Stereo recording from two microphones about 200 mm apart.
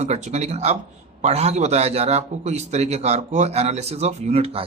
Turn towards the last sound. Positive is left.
turn(degrees=-30)  # may be behind; listen again after turning